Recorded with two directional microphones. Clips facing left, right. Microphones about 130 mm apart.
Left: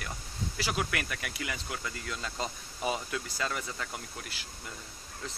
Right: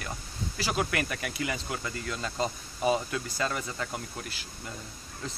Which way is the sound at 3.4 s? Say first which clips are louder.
Right 4 dB; 15° right (ahead or behind).